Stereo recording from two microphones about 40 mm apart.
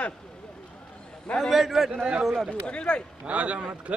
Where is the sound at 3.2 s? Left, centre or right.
Right.